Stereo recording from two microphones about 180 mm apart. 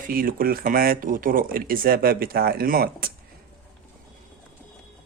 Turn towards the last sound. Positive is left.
turn(degrees=-55)  # may be behind; listen again after turning